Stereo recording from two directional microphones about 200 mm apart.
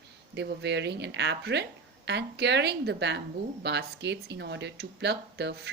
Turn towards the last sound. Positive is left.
turn(degrees=-60)  # may be behind; listen again after turning